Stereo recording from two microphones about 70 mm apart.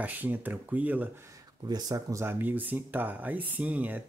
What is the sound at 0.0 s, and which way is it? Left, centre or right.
Speech, right.